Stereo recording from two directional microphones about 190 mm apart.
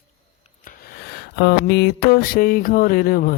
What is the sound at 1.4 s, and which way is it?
Music, 60° left (ahead or behind).